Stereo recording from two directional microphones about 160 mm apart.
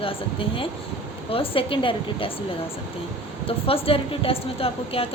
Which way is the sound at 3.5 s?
35° left (ahead or behind).